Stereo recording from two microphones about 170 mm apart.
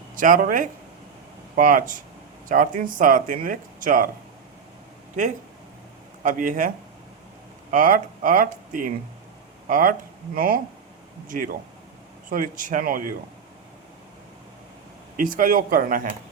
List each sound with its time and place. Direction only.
0.2 s speech: 55° right (ahead or behind)
6.2 s speech: 50° right (ahead or behind)
7.7 s speech: 55° right (ahead or behind)
15.1 s speech: 55° right (ahead or behind)